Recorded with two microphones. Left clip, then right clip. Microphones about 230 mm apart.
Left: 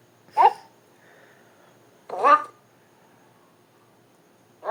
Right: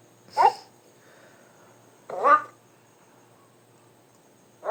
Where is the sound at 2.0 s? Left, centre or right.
Left.